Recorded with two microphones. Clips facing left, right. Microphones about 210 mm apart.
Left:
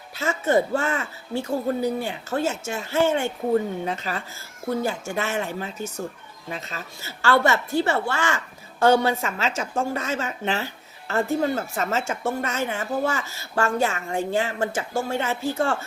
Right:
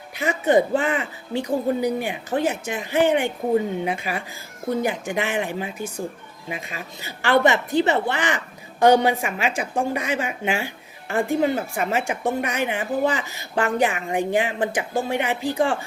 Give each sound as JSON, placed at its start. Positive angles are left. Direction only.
{"t": 0.2, "sound": "a woman's voice", "side_deg": -15}